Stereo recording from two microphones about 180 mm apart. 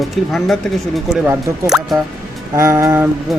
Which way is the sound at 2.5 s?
15° right (ahead or behind).